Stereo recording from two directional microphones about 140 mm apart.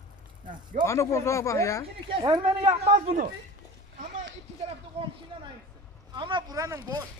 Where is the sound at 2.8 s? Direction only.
45° right (ahead or behind).